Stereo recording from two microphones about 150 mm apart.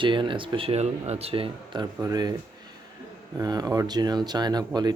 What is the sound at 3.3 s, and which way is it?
Speech, 25° right (ahead or behind).